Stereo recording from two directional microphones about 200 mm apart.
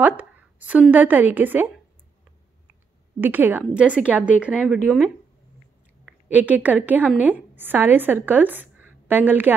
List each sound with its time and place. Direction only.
0.0 s a woman's voice: 10° right (ahead or behind)
3.2 s a woman's voice: 10° right (ahead or behind)
6.2 s a woman's voice: 10° right (ahead or behind)